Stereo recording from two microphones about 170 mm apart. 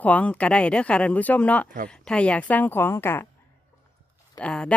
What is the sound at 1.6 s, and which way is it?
Speech, 50° right (ahead or behind).